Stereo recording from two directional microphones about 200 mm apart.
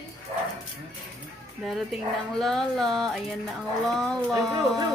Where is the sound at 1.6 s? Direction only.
Centre (ahead or behind).